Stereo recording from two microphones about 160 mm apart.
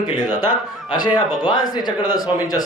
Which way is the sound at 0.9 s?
25° left (ahead or behind).